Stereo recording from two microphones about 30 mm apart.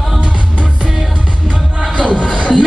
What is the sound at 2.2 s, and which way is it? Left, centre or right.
Music, left.